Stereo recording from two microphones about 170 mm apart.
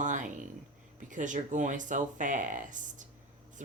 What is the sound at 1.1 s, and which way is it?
Speech, 50° right (ahead or behind).